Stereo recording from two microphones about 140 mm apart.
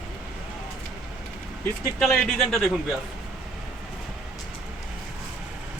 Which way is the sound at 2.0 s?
5° left (ahead or behind).